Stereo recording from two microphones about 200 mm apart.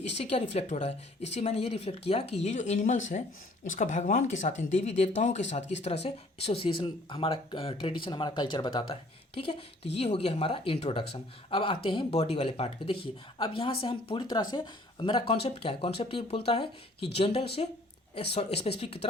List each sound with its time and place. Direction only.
0.1 s speech: 30° left (ahead or behind)